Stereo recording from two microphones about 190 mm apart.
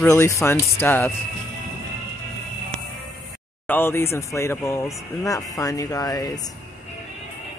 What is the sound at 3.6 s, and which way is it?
Speech, 10° left (ahead or behind).